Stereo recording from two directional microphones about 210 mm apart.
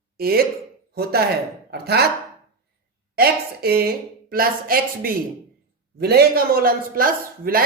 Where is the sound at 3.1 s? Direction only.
45° right (ahead or behind).